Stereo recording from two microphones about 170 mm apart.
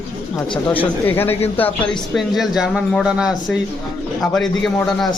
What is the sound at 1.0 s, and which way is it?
Speech, 10° left (ahead or behind).